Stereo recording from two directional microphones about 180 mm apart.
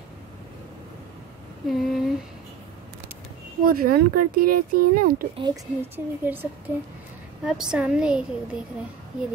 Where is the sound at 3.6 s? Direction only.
55° right (ahead or behind).